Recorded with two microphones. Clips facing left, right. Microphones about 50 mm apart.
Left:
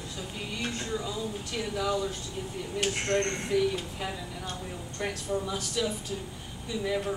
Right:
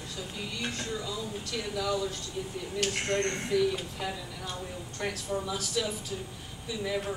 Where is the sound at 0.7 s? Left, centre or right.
Centre.